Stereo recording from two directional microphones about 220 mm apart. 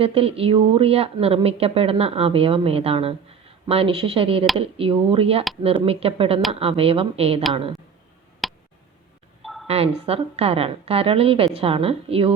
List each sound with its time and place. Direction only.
0.0 s speech: 25° right (ahead or behind)
8.4 s tick: centre (ahead or behind)
9.4 s a sound: centre (ahead or behind)
9.6 s speech: 25° right (ahead or behind)